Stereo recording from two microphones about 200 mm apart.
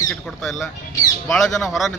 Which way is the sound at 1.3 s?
Centre (ahead or behind).